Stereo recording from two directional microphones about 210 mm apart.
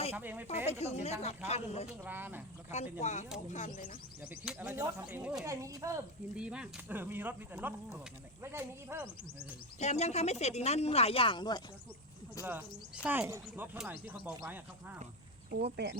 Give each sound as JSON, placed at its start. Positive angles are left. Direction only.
{"t": 0.1, "sound": "speech", "side_deg": -10}
{"t": 0.7, "sound": "speech", "side_deg": 30}
{"t": 2.0, "sound": "speech", "side_deg": -10}
{"t": 3.0, "sound": "speech", "side_deg": 35}
{"t": 4.4, "sound": "speech", "side_deg": -5}
{"t": 5.5, "sound": "speech", "side_deg": -15}
{"t": 9.7, "sound": "speech", "side_deg": 30}
{"t": 12.5, "sound": "speech", "side_deg": -10}
{"t": 15.4, "sound": "speech", "side_deg": -50}